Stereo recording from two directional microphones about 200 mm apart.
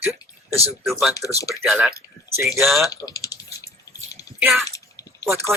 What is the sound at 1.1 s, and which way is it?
Speech, 15° left (ahead or behind).